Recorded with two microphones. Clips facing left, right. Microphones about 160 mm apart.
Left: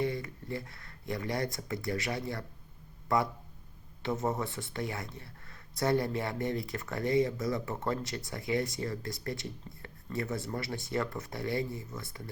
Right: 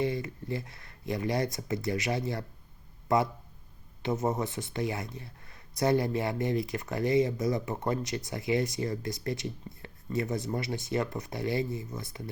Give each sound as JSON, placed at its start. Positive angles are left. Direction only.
{"t": 0.0, "sound": "speech", "side_deg": -20}